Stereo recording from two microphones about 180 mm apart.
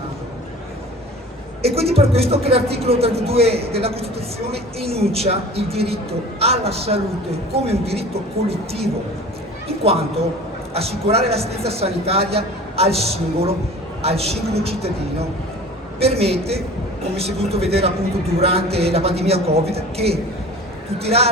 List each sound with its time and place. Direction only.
1.6 s a woman's voice: 35° right (ahead or behind)